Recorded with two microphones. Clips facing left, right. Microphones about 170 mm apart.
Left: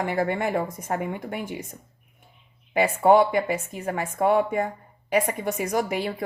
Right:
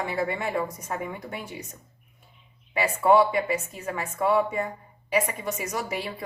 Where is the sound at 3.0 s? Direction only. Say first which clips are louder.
Left 1 dB; 55° left (ahead or behind).